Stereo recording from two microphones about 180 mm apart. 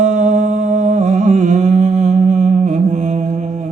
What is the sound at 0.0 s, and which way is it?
Music, 40° right (ahead or behind).